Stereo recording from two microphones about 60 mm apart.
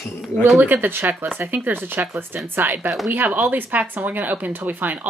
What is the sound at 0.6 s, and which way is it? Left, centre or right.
A woman's voice, right.